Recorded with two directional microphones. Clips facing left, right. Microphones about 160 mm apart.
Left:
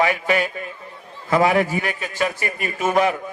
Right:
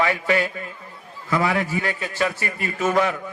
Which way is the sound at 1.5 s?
20° left (ahead or behind).